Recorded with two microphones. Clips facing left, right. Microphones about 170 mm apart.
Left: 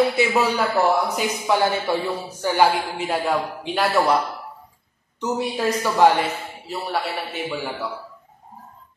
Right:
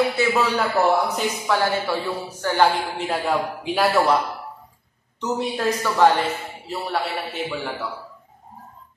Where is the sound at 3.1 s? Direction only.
Centre (ahead or behind).